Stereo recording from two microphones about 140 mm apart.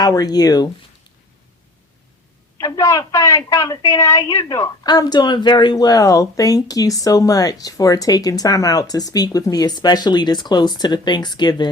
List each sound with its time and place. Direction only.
0.0 s a woman's voice: 25° left (ahead or behind)
2.6 s a woman's voice: 25° left (ahead or behind)